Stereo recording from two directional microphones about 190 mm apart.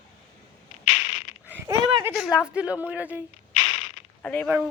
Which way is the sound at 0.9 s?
35° left (ahead or behind).